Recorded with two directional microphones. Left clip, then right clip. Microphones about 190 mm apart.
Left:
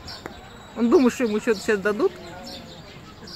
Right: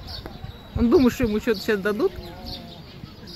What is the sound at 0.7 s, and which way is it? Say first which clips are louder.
Speech: even; centre (ahead or behind).